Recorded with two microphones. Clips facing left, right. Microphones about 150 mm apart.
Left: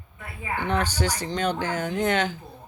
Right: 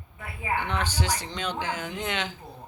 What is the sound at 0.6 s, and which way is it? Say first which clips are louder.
Speech: left 7 dB; 40° left (ahead or behind).